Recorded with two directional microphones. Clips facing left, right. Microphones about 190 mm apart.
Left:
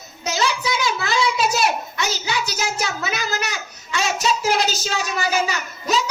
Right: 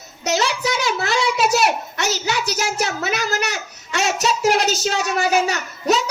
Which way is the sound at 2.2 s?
65° right (ahead or behind).